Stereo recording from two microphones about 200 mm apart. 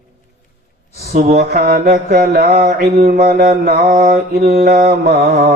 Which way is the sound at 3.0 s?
50° right (ahead or behind).